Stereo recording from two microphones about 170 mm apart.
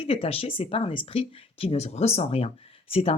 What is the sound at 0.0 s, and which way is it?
Speech, 35° left (ahead or behind).